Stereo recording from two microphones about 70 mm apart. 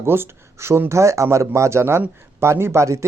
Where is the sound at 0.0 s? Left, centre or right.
Right.